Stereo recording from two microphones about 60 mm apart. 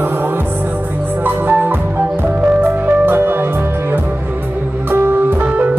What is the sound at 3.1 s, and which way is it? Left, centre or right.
Music, right.